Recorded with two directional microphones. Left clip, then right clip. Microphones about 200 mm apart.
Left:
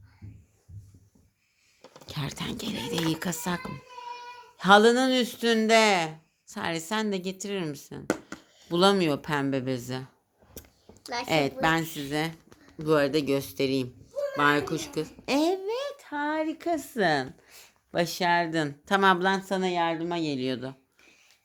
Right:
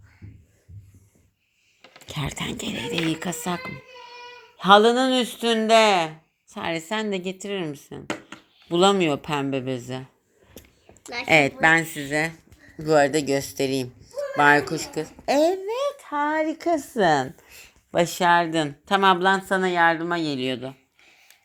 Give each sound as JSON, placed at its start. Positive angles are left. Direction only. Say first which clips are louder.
{"t": 2.1, "sound": "a woman's voice", "louder": "right 5 dB", "side_deg": -5}
{"t": 11.3, "sound": "a woman's voice", "louder": "right 8 dB", "side_deg": -10}
{"t": 13.4, "sound": "speech", "louder": "right 3 dB", "side_deg": 50}
{"t": 14.3, "sound": "a woman's voice", "louder": "right 7 dB", "side_deg": 0}
{"t": 15.3, "sound": "a sound", "louder": "right 6 dB", "side_deg": 15}
{"t": 16.0, "sound": "a woman's voice", "louder": "right 6 dB", "side_deg": -5}